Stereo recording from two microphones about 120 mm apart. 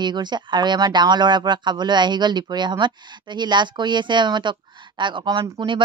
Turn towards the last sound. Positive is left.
turn(degrees=-45)  # may be behind; listen again after turning